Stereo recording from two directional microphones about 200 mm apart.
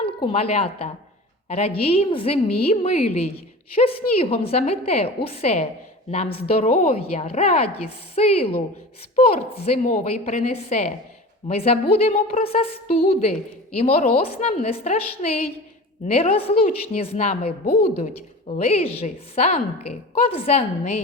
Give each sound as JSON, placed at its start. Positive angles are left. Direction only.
{"t": 0.0, "sound": "a woman's voice", "side_deg": 25}